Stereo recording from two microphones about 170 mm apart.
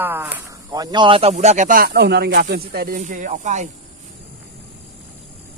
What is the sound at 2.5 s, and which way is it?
Speech, 65° right (ahead or behind).